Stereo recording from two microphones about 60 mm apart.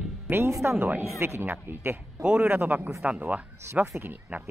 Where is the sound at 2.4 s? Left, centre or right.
Right.